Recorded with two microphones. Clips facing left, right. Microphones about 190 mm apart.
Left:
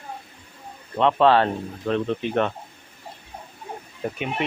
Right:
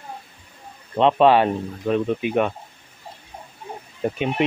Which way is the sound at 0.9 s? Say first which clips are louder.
Right 2 dB; 20° right (ahead or behind).